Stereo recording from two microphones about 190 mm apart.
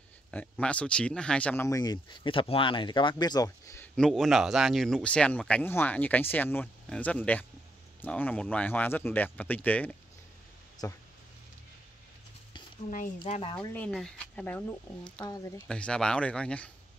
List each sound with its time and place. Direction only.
0.3 s speech: 5° left (ahead or behind)
10.8 s speech: 20° left (ahead or behind)
13.3 s speech: 30° left (ahead or behind)
13.6 s speech: 5° left (ahead or behind)
15.2 s speech: 20° left (ahead or behind)
15.7 s speech: 5° left (ahead or behind)